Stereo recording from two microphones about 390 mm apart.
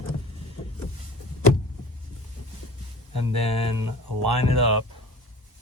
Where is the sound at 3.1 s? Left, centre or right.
Right.